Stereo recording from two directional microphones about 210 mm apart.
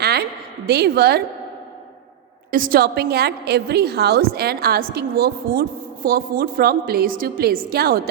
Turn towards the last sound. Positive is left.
turn(degrees=-45)  # may be behind; listen again after turning